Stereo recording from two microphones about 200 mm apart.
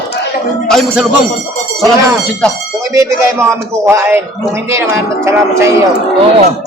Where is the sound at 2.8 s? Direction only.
15° right (ahead or behind).